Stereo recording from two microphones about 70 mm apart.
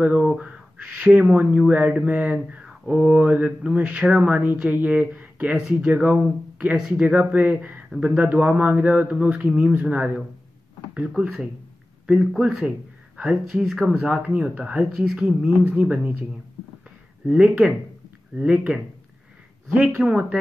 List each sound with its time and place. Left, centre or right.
0.0 s speech: centre
5.6 s speech: centre
12.4 s speech: centre
13.9 s speech: centre
17.3 s speech: centre